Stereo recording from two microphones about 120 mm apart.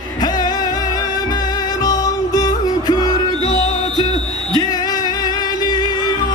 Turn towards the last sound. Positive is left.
turn(degrees=35)  # may be behind; listen again after turning